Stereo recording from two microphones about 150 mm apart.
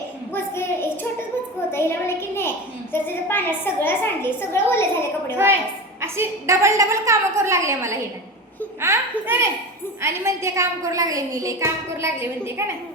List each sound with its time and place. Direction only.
0.5 s a sound: 15° left (ahead or behind)
1.7 s a child's voice: 15° left (ahead or behind)
6.0 s a woman's voice: 20° right (ahead or behind)